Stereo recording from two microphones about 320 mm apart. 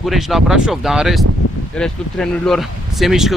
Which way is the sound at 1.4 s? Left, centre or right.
Left.